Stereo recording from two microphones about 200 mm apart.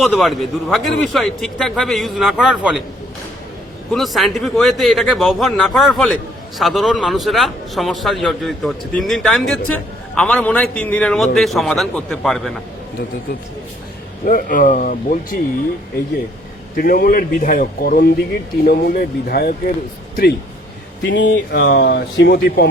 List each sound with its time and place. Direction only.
0.0 s speech: centre (ahead or behind)
3.9 s speech: centre (ahead or behind)
14.3 s speech: 45° left (ahead or behind)
16.7 s speech: 45° left (ahead or behind)
21.0 s speech: 60° left (ahead or behind)